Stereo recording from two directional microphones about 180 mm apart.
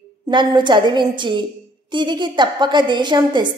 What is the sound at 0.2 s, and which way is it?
A woman's voice, 25° right (ahead or behind).